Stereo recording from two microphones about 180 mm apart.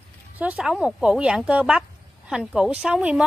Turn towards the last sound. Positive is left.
turn(degrees=-5)  # may be behind; listen again after turning